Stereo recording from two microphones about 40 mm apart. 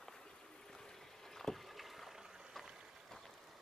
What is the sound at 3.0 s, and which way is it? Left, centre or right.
Vehicle, centre.